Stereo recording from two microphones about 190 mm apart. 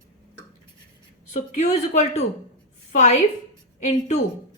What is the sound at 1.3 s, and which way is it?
A woman's voice, 40° left (ahead or behind).